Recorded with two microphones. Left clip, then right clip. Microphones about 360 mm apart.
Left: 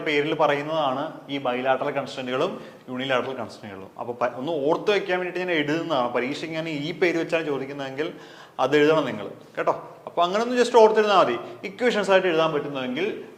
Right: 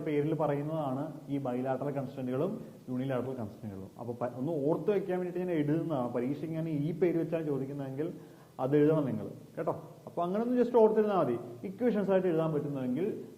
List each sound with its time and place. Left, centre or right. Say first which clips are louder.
0.0 s a man's voice: left 10 dB; centre
4.7 s a man's voice: left 10 dB; centre